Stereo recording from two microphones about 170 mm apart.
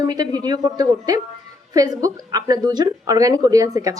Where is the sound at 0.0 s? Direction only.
20° right (ahead or behind).